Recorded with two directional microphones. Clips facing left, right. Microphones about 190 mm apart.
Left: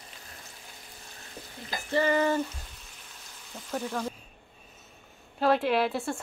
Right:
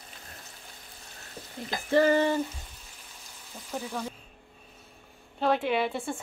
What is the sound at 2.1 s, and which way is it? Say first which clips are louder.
Frying: right 1 dB; 30° right (ahead or behind).